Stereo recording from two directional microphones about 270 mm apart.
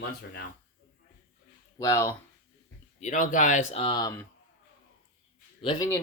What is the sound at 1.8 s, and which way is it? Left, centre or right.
Speech, centre.